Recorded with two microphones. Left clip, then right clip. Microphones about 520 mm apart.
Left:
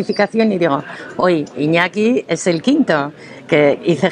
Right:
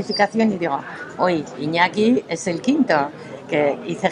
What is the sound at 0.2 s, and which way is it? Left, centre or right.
Speech, left.